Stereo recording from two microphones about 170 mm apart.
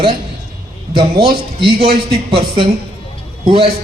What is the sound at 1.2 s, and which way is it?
Speech, 30° right (ahead or behind).